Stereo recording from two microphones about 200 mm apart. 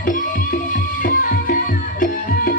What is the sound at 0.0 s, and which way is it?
Music, 45° left (ahead or behind).